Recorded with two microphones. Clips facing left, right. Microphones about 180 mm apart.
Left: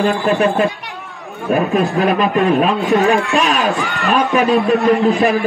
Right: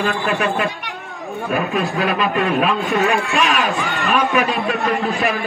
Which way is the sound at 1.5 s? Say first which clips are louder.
Left 6 dB; 40° left (ahead or behind).